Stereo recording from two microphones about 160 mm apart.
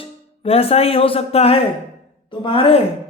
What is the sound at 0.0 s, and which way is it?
A woman's voice, 35° left (ahead or behind).